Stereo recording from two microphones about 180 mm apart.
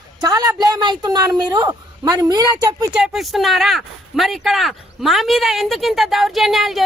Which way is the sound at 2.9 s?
Centre (ahead or behind).